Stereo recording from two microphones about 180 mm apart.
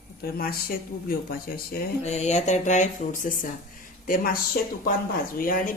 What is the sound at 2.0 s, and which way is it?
Speech, 40° left (ahead or behind).